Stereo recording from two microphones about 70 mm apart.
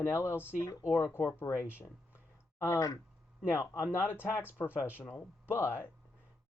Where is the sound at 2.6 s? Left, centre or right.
Left.